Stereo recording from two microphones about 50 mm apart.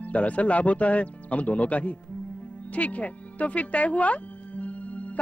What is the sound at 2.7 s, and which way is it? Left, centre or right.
Music, left.